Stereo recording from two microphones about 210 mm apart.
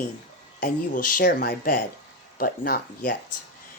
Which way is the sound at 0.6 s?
40° left (ahead or behind).